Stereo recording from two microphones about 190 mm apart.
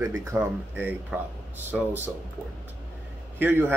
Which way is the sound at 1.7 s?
Centre (ahead or behind).